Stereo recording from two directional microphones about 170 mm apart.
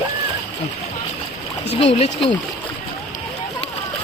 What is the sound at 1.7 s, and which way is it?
Speech, 35° left (ahead or behind).